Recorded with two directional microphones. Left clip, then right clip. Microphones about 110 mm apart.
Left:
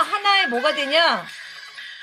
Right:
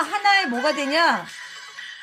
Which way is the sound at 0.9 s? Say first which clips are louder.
Left 1 dB; 50° left (ahead or behind).